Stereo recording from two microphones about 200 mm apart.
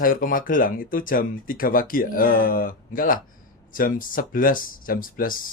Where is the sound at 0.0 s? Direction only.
45° left (ahead or behind).